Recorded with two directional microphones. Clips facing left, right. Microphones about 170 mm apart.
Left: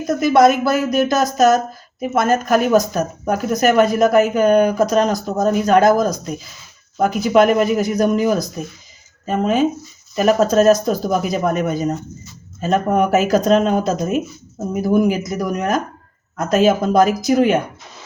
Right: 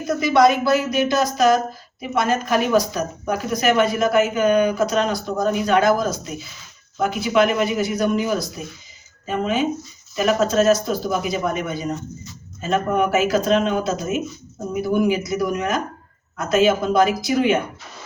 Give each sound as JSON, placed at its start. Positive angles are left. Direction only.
{"t": 0.2, "sound": "speech", "side_deg": 50}